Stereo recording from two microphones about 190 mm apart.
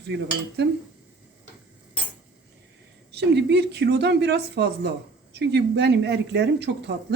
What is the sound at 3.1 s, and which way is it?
Speech, 60° right (ahead or behind).